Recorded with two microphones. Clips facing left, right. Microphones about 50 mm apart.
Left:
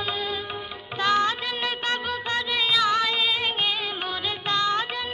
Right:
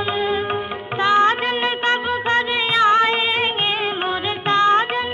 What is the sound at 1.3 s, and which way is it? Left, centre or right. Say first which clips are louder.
Music of bollywood: right 8 dB; right.